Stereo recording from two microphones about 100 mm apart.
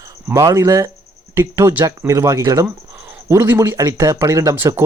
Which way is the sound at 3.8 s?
30° right (ahead or behind).